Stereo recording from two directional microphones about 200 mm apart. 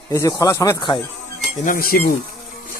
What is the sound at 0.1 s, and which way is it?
Speech, 15° left (ahead or behind).